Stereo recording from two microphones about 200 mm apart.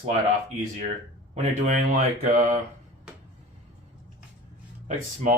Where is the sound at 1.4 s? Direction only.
35° right (ahead or behind).